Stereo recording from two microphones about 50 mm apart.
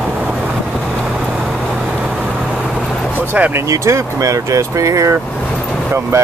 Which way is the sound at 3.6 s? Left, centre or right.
Right.